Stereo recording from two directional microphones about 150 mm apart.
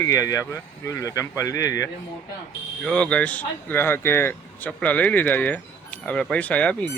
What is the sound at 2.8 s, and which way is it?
Speech, 5° left (ahead or behind).